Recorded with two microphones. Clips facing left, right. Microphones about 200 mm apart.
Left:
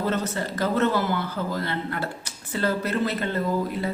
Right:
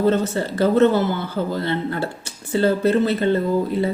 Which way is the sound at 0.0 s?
30° right (ahead or behind).